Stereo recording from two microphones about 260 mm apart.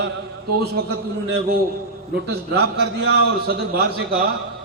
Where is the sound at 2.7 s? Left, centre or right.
Right.